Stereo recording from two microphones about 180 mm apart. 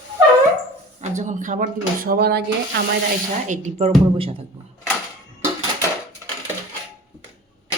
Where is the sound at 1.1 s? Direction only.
45° right (ahead or behind); by 2.4 s 60° right (ahead or behind).